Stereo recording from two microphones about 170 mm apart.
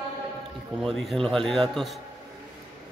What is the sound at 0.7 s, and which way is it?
A man's voice, centre (ahead or behind).